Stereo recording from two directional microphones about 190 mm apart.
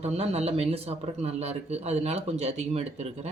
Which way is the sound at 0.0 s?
35° right (ahead or behind).